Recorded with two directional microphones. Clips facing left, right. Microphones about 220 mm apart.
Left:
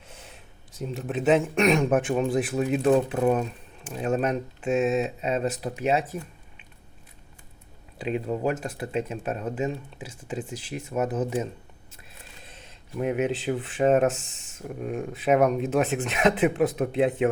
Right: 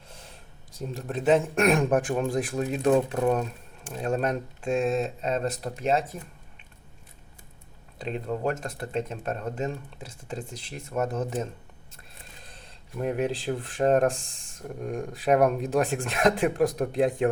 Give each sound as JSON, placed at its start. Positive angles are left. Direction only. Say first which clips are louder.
{"t": 0.1, "sound": "a sound", "louder": "left 1 dB", "side_deg": 5}
{"t": 0.8, "sound": "speech", "louder": "left 2 dB", "side_deg": 0}
{"t": 7.9, "sound": "speech", "louder": "left 3 dB", "side_deg": 5}
{"t": 12.6, "sound": "speech", "louder": "left 2 dB", "side_deg": 5}